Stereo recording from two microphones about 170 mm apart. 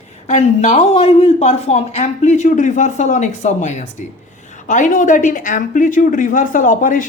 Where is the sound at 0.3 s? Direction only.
45° left (ahead or behind).